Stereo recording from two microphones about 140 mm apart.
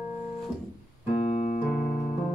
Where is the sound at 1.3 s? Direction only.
55° left (ahead or behind).